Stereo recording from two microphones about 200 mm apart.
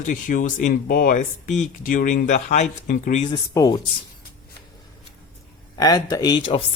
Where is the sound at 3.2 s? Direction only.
20° left (ahead or behind).